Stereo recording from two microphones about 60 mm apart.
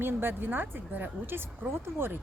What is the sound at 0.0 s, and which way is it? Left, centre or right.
Speech, right.